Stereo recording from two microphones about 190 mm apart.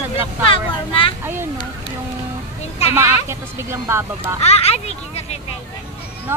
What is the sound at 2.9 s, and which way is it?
Speech, 15° right (ahead or behind).